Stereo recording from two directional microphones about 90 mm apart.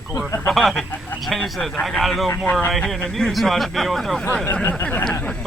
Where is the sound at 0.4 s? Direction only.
5° left (ahead or behind).